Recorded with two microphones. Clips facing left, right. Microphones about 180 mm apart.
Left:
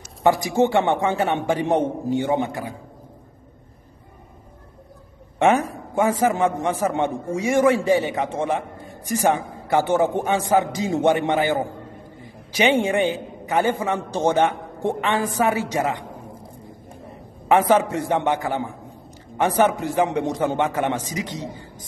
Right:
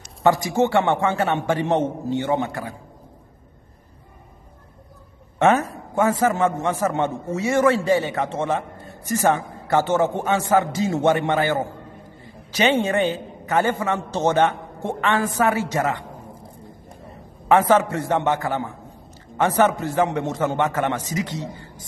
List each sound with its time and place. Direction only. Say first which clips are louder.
0.2 s a man's voice: even; 15° left (ahead or behind)
5.4 s a man's voice: even; 15° left (ahead or behind)
17.5 s a man's voice: even; 15° left (ahead or behind)